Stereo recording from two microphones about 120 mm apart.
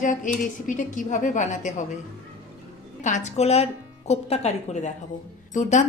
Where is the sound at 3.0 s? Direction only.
90° left.